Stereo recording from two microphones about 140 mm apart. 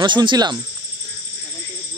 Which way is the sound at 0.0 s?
35° right (ahead or behind).